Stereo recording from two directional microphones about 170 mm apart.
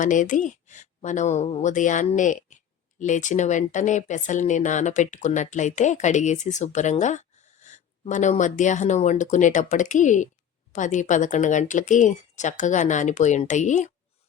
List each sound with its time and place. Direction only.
0.0 s speech: 50° left (ahead or behind)